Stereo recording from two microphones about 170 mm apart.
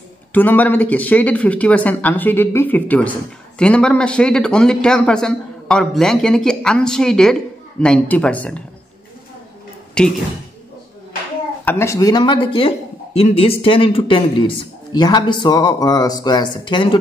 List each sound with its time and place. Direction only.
0.3 s speech: 10° left (ahead or behind)
10.0 s speech: 5° left (ahead or behind)
11.6 s speech: 15° left (ahead or behind)